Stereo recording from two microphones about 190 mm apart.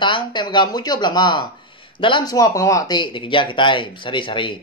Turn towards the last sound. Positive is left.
turn(degrees=25)  # may be behind; listen again after turning